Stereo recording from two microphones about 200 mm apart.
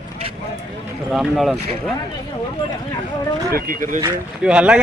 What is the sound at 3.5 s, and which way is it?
Speech, 45° right (ahead or behind).